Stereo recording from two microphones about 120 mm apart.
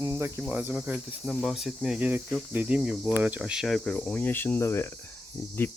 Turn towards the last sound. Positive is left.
turn(degrees=15)  # may be behind; listen again after turning